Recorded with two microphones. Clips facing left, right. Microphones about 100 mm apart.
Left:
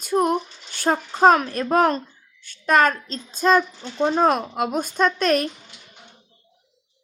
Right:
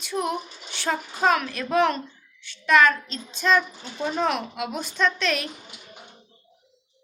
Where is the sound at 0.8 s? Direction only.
45° left (ahead or behind).